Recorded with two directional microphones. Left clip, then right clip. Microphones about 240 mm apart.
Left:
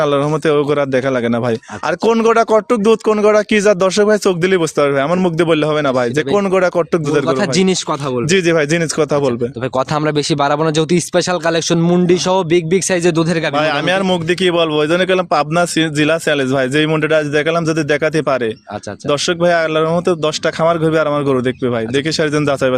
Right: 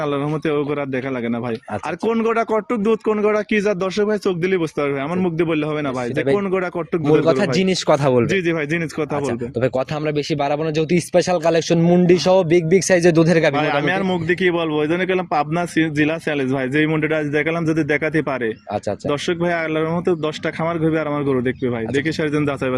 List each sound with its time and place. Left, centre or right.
0.0 s speech: left
7.9 s speech: centre
8.3 s speech: left
9.7 s speech: left; by 13.5 s centre
13.6 s speech: left